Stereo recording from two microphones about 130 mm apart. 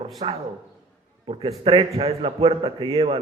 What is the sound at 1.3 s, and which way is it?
A man's voice, 45° right (ahead or behind).